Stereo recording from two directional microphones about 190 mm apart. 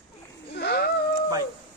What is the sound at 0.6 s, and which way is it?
Speech, 60° left (ahead or behind).